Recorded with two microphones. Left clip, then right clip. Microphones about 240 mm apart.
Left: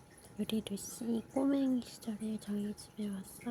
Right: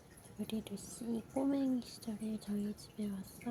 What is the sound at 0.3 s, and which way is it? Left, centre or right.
Speech, left.